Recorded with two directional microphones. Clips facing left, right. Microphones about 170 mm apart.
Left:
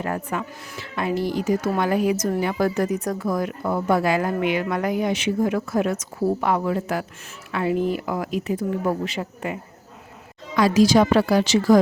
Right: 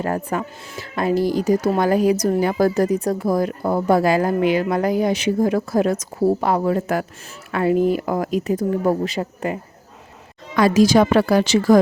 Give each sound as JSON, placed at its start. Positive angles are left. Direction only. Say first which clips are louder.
{"t": 0.0, "sound": "a woman's voice", "louder": "right 4 dB", "side_deg": -35}
{"t": 10.5, "sound": "speech", "louder": "right 2 dB", "side_deg": -50}